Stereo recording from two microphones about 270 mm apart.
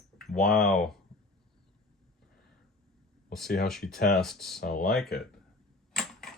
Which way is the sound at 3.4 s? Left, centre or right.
Left.